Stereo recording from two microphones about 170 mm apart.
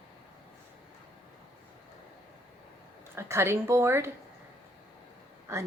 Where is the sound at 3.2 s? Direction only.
15° right (ahead or behind).